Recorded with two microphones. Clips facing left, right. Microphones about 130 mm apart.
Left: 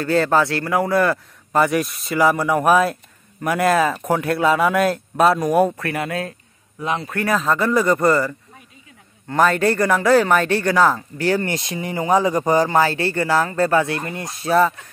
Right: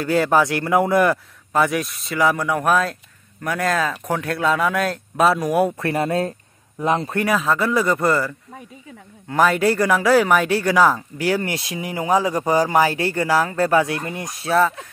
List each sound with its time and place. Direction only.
0.0 s speech: 10° right (ahead or behind)
1.5 s speech: centre (ahead or behind)
5.8 s speech: 30° right (ahead or behind)
7.2 s speech: centre (ahead or behind)
14.4 s speech: centre (ahead or behind)